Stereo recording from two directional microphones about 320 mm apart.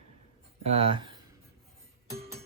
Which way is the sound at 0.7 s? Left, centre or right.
Centre.